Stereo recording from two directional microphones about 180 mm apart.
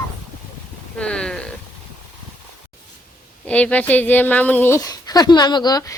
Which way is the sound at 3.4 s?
5° left (ahead or behind).